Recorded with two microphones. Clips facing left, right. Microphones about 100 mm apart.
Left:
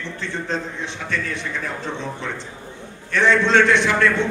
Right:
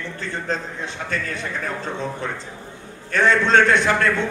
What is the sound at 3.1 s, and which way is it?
A man's voice, 40° right (ahead or behind).